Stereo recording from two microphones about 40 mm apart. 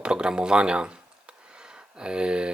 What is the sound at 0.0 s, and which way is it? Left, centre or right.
Speech, right.